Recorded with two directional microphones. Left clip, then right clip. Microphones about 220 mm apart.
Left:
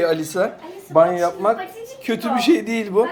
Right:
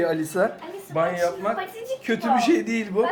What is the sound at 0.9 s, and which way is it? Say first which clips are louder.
Speech: left 8 dB; 15° left (ahead or behind).